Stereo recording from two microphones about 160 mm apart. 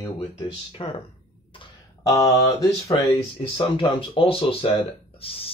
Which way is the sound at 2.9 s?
35° left (ahead or behind).